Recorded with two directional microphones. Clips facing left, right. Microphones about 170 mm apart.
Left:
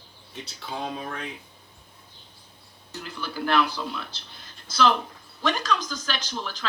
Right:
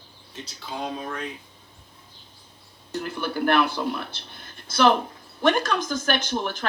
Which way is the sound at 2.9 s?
55° right (ahead or behind).